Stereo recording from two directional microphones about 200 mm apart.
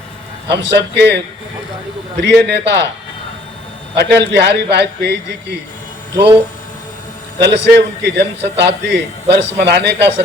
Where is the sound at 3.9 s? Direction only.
55° right (ahead or behind).